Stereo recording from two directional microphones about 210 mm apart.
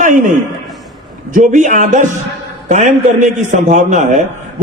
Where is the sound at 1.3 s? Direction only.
35° right (ahead or behind).